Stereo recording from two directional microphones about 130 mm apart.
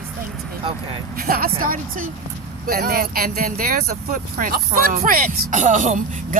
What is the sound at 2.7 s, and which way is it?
Speech, 90° right.